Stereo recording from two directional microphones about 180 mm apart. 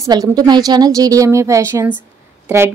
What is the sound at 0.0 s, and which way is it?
A woman's voice, 20° right (ahead or behind).